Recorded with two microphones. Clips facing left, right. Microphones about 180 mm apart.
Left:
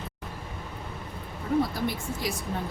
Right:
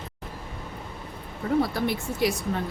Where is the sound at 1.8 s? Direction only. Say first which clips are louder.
Right 5 dB; 70° right (ahead or behind).